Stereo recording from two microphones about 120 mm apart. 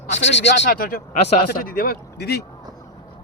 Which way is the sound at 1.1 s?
90° left.